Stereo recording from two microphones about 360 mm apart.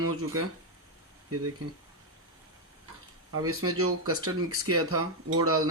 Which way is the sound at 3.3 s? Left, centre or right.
Right.